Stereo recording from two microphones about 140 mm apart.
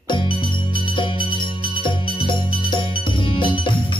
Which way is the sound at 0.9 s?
35° left (ahead or behind).